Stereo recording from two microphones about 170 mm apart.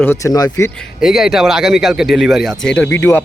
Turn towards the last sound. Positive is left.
turn(degrees=15)  # may be behind; listen again after turning